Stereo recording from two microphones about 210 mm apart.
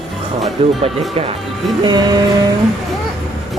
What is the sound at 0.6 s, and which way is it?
Music, 25° right (ahead or behind).